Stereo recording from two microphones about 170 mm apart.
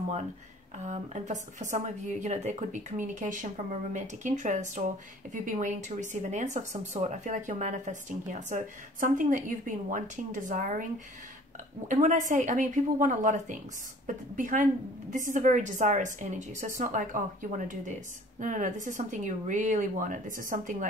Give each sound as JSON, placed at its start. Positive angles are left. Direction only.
{"t": 0.8, "sound": "speech", "side_deg": -45}
{"t": 11.9, "sound": "speech", "side_deg": -45}